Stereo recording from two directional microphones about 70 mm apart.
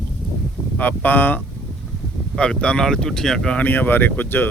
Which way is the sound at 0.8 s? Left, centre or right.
Left.